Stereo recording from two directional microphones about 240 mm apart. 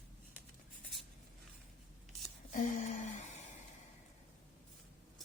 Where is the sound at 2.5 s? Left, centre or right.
Left.